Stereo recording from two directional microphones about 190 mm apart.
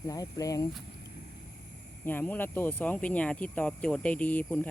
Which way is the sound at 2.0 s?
10° left (ahead or behind).